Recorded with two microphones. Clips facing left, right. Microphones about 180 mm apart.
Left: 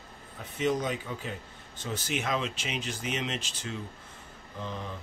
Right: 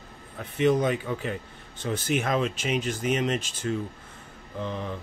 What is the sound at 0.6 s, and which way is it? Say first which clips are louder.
Speech: right 6 dB; 60° right (ahead or behind).